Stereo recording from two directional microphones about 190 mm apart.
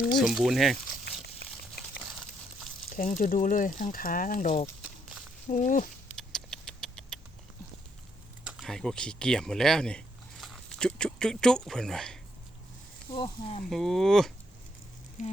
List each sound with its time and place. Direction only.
0.2 s speech: centre (ahead or behind)
1.2 s crumpling: 55° left (ahead or behind)
2.9 s speech: 45° left (ahead or behind)
6.1 s rodents: 5° left (ahead or behind)
8.4 s speech: centre (ahead or behind)
13.1 s speech: 25° left (ahead or behind)
13.7 s speech: centre (ahead or behind)
15.2 s speech: 35° left (ahead or behind)